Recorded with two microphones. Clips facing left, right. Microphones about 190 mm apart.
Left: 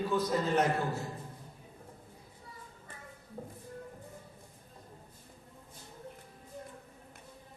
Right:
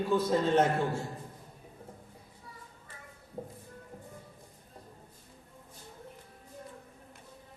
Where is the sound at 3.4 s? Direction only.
20° right (ahead or behind).